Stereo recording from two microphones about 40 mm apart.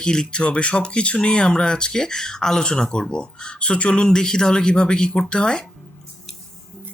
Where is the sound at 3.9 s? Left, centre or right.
Centre.